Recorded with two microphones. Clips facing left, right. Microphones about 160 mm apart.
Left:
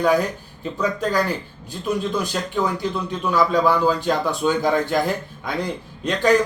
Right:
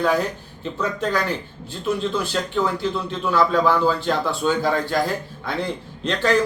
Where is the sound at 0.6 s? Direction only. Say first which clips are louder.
Left 1 dB; 10° left (ahead or behind).